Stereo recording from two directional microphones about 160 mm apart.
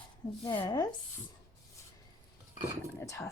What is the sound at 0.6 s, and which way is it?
Speech, 25° left (ahead or behind).